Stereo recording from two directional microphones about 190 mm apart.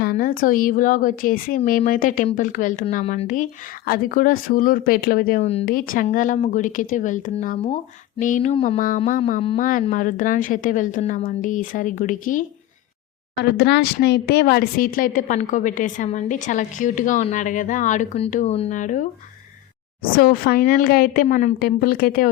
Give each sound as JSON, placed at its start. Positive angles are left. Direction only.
{"t": 0.0, "sound": "a woman's voice", "side_deg": 50}
{"t": 5.4, "sound": "speech", "side_deg": 35}
{"t": 5.6, "sound": "a woman's voice", "side_deg": 45}
{"t": 13.4, "sound": "speech", "side_deg": 60}
{"t": 20.1, "sound": "a woman's voice", "side_deg": 50}